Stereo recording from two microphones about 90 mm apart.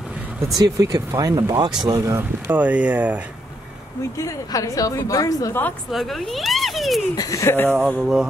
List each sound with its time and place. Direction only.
0.6 s speech: 40° right (ahead or behind)
2.5 s speech: 15° right (ahead or behind)
4.2 s speech: 35° left (ahead or behind)
5.5 s speech: 20° left (ahead or behind)
5.9 s speech: centre (ahead or behind)
7.2 s speech: 40° left (ahead or behind)
7.7 s speech: 10° left (ahead or behind)
8.0 s speech: 5° right (ahead or behind)